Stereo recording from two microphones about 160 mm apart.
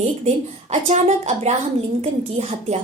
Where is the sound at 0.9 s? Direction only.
45° right (ahead or behind).